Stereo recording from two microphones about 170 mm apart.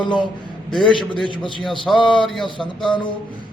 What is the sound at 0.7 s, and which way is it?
Speech, centre (ahead or behind).